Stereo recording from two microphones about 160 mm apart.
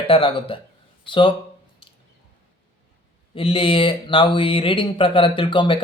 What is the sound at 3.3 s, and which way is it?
Speech, 35° left (ahead or behind).